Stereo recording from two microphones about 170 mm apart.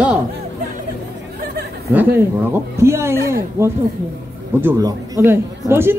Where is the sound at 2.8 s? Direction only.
15° right (ahead or behind).